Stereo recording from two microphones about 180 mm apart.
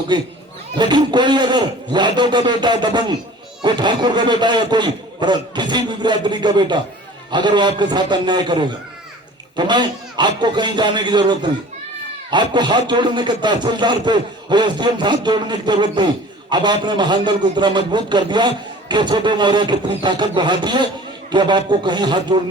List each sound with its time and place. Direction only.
0.1 s a man's voice: 25° right (ahead or behind)